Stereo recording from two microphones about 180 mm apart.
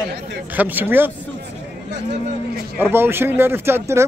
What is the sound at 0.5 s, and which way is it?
Speech, 10° right (ahead or behind).